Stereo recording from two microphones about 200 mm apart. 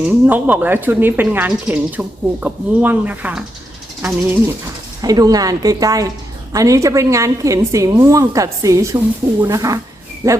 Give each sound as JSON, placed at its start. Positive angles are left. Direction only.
{"t": 0.0, "sound": "speech", "side_deg": -10}